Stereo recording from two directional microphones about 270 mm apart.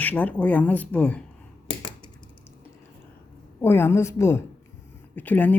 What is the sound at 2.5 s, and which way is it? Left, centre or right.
Typing, centre.